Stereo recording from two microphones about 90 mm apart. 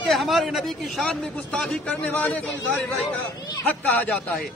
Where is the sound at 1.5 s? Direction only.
10° left (ahead or behind).